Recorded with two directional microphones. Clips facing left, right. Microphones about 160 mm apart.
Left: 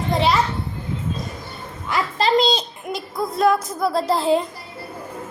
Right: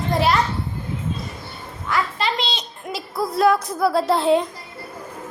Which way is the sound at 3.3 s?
Centre (ahead or behind).